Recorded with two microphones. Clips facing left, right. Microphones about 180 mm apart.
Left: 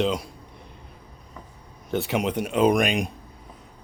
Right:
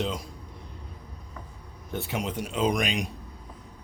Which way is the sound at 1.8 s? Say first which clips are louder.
Left 7 dB; 80° left.